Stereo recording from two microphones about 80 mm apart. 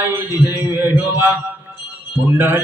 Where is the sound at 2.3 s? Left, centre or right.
Right.